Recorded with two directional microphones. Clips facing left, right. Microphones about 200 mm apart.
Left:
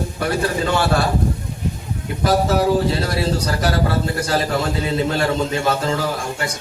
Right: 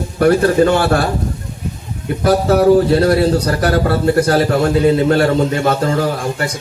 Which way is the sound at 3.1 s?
55° right (ahead or behind).